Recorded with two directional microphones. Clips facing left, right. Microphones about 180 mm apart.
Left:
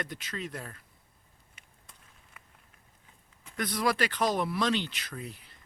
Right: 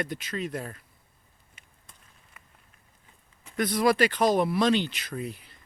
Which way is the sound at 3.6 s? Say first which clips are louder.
Right 6 dB; 20° right (ahead or behind).